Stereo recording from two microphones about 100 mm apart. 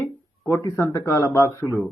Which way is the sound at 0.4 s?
30° left (ahead or behind).